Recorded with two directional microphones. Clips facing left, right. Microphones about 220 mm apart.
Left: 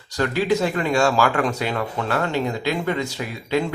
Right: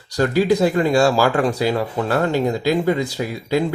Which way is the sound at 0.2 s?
35° right (ahead or behind).